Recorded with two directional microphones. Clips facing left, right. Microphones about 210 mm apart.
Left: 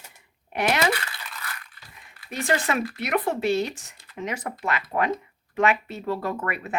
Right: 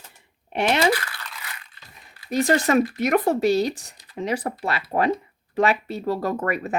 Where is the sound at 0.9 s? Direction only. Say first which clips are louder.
Right 4 dB; 25° left (ahead or behind).